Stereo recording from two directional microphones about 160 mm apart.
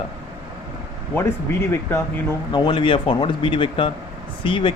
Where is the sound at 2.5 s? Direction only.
30° left (ahead or behind).